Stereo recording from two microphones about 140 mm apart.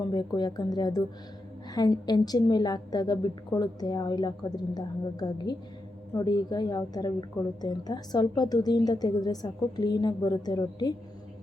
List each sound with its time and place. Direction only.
0.0 s a woman's voice: 30° left (ahead or behind)